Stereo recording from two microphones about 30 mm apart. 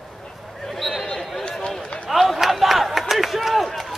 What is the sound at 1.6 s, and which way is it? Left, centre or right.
Run, left.